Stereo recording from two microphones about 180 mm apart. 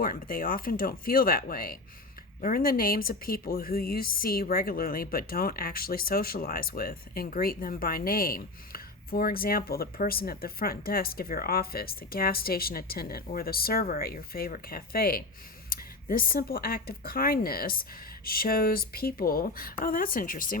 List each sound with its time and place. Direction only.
0.0 s speech: 55° left (ahead or behind)